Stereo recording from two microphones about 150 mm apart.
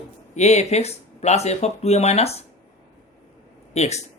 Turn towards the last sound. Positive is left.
turn(degrees=50)  # may be behind; listen again after turning